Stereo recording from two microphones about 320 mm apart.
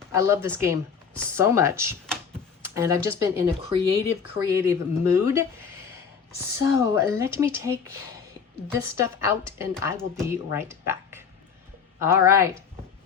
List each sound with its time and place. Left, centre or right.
0.1 s speech: centre
6.6 s speech: centre